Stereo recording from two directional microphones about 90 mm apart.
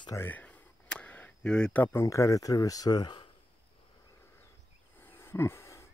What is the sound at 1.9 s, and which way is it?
Speech, 35° left (ahead or behind).